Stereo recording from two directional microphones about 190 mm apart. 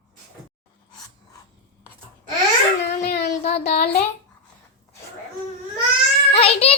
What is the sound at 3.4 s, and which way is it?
Child singing, 35° left (ahead or behind).